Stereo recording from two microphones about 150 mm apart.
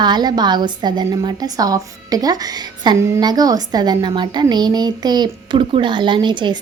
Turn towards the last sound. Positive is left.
turn(degrees=-30)  # may be behind; listen again after turning